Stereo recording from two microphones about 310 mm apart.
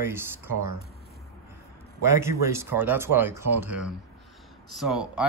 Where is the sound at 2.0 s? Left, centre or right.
Centre.